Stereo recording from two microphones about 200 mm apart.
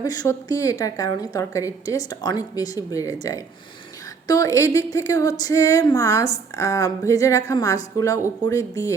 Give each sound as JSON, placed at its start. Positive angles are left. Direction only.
{"t": 0.0, "sound": "speech", "side_deg": 15}